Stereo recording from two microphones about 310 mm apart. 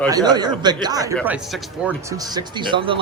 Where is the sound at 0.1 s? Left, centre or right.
Centre.